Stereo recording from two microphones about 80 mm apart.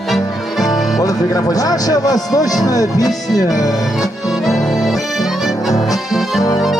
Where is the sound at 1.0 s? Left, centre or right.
Left.